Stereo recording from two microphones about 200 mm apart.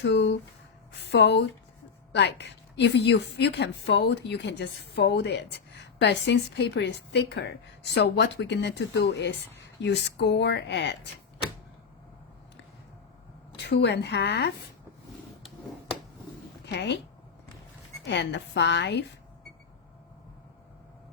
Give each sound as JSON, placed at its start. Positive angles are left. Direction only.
{"t": 0.0, "sound": "a woman's voice", "side_deg": 60}
{"t": 13.6, "sound": "a woman's voice", "side_deg": 55}
{"t": 16.6, "sound": "a woman's voice", "side_deg": 60}
{"t": 18.0, "sound": "a woman's voice", "side_deg": 60}